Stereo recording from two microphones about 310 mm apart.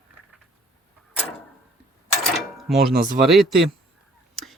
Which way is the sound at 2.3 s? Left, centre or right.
Centre.